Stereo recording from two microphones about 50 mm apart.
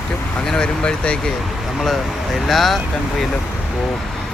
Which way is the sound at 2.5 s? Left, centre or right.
Centre.